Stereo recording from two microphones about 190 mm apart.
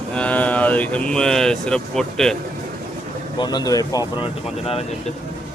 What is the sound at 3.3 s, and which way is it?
Speech, 20° left (ahead or behind).